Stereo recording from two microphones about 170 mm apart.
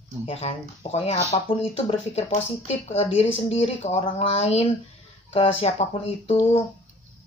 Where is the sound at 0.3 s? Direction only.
35° left (ahead or behind).